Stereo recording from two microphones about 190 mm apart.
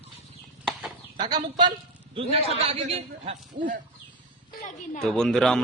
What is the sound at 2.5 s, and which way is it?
A man's voice, 30° right (ahead or behind).